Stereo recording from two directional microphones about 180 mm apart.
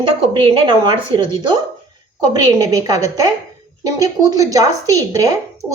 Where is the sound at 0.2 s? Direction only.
30° right (ahead or behind).